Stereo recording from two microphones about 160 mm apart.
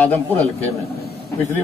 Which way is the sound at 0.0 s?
10° left (ahead or behind).